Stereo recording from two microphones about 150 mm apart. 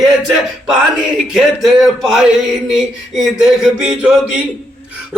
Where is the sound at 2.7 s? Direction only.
5° right (ahead or behind).